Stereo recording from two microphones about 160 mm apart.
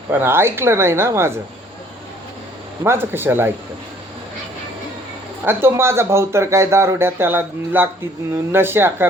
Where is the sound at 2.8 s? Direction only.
15° right (ahead or behind).